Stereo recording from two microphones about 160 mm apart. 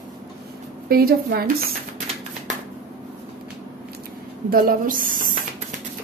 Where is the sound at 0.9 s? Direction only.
70° right (ahead or behind).